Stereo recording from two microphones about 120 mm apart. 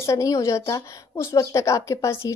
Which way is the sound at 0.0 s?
25° left (ahead or behind).